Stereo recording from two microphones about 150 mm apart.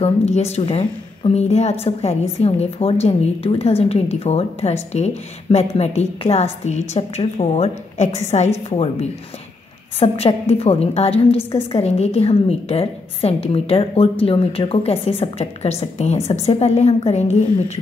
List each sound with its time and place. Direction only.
0.0 s a woman's voice: 45° left (ahead or behind)
9.9 s a woman's voice: 40° left (ahead or behind)